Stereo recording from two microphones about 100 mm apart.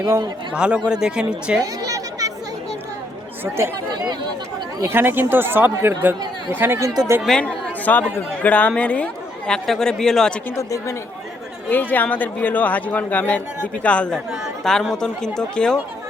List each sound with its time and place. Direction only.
0.5 s speech: 10° right (ahead or behind)
1.6 s a sound: 35° right (ahead or behind)
4.8 s speech: 25° right (ahead or behind)
7.2 s speech: 5° left (ahead or behind)
10.5 s speech: 30° left (ahead or behind)
11.7 s speech: 20° left (ahead or behind)